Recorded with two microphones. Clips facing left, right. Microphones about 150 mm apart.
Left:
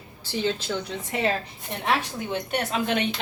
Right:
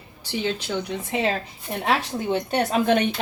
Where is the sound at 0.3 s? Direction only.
15° right (ahead or behind).